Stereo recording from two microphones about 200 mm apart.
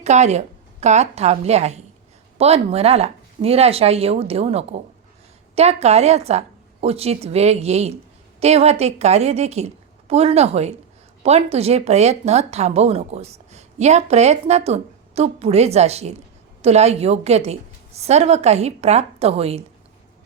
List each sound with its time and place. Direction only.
0.0 s a woman's voice: 35° right (ahead or behind)